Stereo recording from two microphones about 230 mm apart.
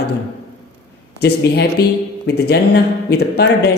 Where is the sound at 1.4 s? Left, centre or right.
Left.